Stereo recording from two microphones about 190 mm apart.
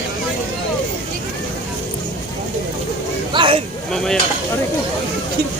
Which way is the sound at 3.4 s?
25° right (ahead or behind).